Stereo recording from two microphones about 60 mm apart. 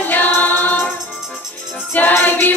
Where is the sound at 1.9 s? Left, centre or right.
Left.